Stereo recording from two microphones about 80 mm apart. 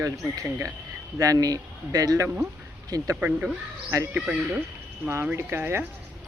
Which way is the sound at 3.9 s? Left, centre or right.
Right.